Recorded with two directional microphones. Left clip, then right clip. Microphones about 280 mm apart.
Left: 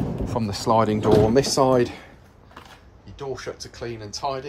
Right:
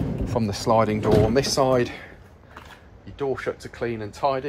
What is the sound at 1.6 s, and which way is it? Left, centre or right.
Speech, left.